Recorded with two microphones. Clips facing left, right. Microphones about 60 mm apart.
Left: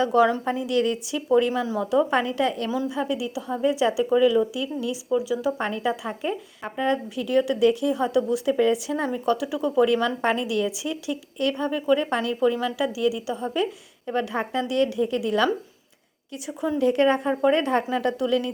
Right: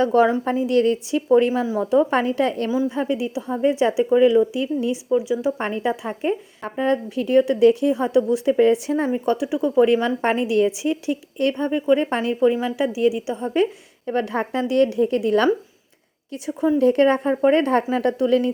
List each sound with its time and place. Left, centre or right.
0.0 s speech: right
5.1 s speech: right
5.5 s speech: right
14.1 s speech: right
16.7 s speech: right